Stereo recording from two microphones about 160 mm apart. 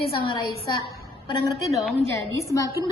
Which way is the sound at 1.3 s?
30° left (ahead or behind).